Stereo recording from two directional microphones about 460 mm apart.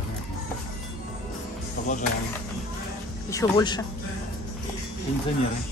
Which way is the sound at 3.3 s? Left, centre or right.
Centre.